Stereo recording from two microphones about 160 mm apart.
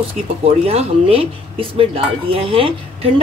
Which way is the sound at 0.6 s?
40° right (ahead or behind).